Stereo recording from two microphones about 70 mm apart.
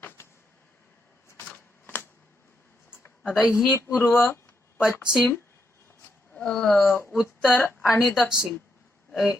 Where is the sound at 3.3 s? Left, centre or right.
Centre.